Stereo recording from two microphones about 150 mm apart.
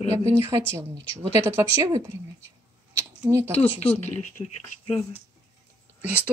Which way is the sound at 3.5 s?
45° left (ahead or behind).